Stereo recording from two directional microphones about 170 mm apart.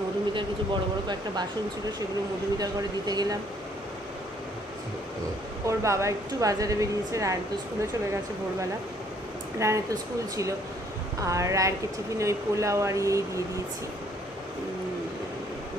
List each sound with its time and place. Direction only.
1.0 s speech: 25° right (ahead or behind)
2.6 s speech: 20° right (ahead or behind)
5.7 s speech: 15° right (ahead or behind)
9.6 s speech: 20° right (ahead or behind)